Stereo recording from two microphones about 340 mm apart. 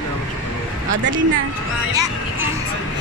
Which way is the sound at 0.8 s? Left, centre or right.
Right.